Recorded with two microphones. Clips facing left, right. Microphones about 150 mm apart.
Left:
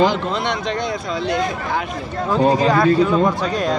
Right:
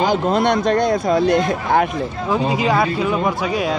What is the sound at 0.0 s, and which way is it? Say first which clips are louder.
A man's voice: right 2 dB; 45° right (ahead or behind).